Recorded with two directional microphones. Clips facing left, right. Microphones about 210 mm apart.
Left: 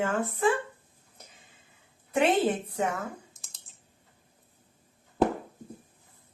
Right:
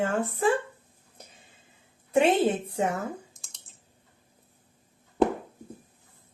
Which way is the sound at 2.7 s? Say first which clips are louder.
Right 2 dB; 30° right (ahead or behind).